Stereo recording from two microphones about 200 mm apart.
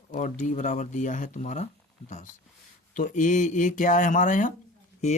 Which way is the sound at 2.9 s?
40° left (ahead or behind).